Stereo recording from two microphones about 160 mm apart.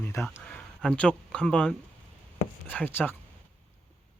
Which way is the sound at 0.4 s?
5° left (ahead or behind).